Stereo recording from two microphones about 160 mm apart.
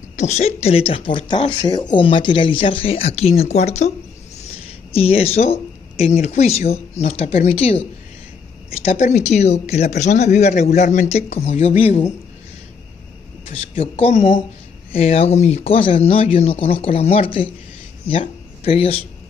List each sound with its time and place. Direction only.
0.1 s speech: 45° left (ahead or behind)
4.9 s speech: 40° left (ahead or behind)
8.8 s speech: 45° left (ahead or behind)
13.7 s speech: 40° left (ahead or behind)